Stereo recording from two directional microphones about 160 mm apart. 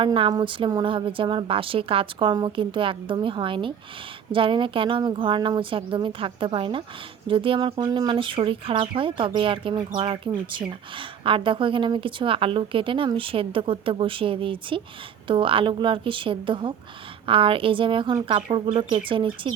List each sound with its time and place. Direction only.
0.0 s speech: 30° right (ahead or behind)